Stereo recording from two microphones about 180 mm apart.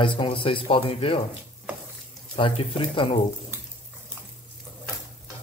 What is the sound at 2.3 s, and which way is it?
Speech, 30° left (ahead or behind).